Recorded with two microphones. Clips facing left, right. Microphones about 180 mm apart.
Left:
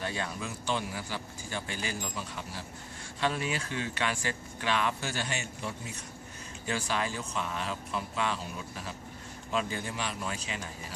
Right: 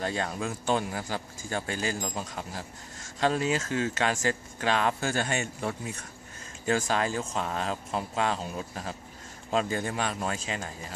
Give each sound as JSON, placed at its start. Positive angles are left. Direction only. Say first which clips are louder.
{"t": 0.0, "sound": "speech", "louder": "right 5 dB", "side_deg": -40}